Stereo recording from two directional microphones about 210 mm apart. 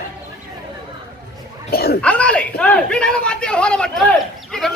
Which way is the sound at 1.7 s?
50° left (ahead or behind).